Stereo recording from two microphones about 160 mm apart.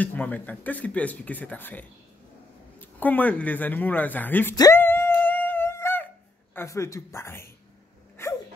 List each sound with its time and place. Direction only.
0.0 s speech: 10° left (ahead or behind)
4.6 s a sound: 15° left (ahead or behind)
6.5 s speech: 15° left (ahead or behind)
8.2 s dog: 15° left (ahead or behind)